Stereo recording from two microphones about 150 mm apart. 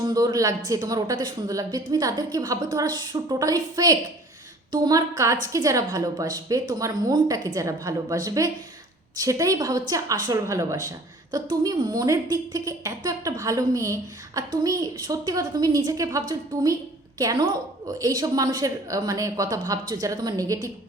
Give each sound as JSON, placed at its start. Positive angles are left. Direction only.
{"t": 0.0, "sound": "a woman's voice", "side_deg": -25}